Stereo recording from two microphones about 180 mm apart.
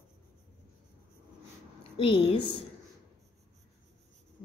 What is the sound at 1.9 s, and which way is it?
Speech, 30° left (ahead or behind).